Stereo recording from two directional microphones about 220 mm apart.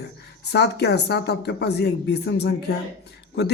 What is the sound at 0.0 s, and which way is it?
Speech, 50° left (ahead or behind).